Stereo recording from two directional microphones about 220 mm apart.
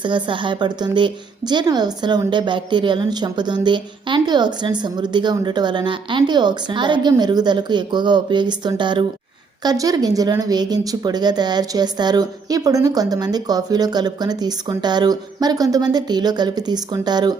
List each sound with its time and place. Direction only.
0.0 s a woman's voice: 20° right (ahead or behind)